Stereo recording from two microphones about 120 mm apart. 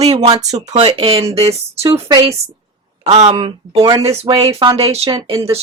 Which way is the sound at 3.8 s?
30° right (ahead or behind).